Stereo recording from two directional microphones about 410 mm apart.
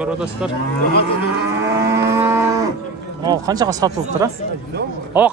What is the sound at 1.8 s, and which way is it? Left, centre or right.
Cattle, centre.